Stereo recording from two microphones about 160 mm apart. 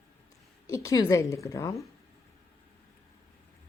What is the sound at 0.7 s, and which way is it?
A woman's voice, 20° left (ahead or behind).